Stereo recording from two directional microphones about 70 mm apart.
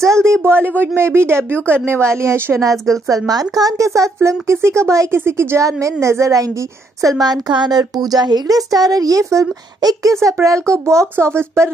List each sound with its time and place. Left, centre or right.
0.0 s speech: right
3.1 s speech: right
7.2 s speech: right
10.2 s speech: right